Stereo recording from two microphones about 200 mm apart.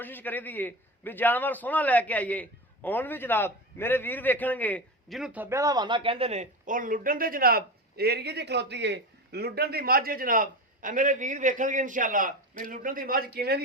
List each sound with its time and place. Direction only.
0.0 s a man's voice: 10° left (ahead or behind); by 13.6 s 50° right (ahead or behind)